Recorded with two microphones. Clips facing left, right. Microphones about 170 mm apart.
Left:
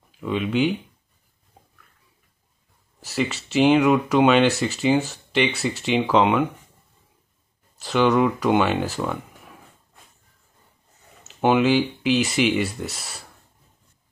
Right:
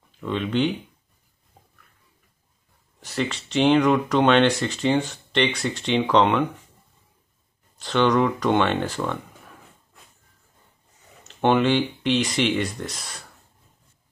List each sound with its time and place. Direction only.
0.2 s speech: 5° left (ahead or behind)
3.0 s speech: 5° left (ahead or behind)
7.7 s speech: 5° left (ahead or behind)
11.2 s speech: 5° left (ahead or behind)